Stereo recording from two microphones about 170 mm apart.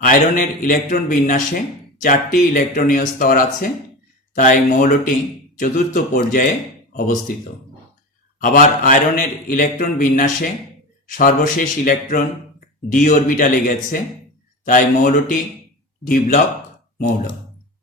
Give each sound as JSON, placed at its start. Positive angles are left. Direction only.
{"t": 0.0, "sound": "a man's voice", "side_deg": 55}
{"t": 8.4, "sound": "a man's voice", "side_deg": 50}